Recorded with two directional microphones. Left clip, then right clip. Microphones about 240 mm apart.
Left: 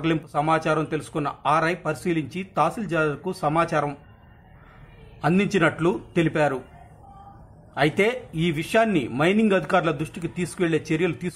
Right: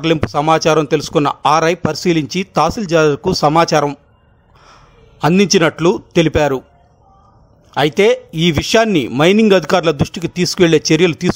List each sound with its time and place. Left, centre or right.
0.0 s a man's voice: right
5.2 s a man's voice: right
7.7 s a man's voice: right